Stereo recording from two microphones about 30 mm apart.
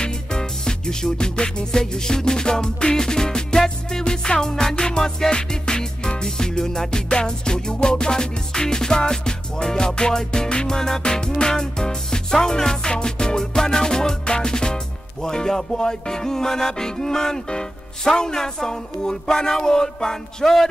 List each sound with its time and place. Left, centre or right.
0.0 s music: left